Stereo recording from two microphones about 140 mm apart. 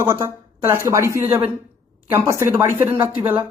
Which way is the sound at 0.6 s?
20° right (ahead or behind).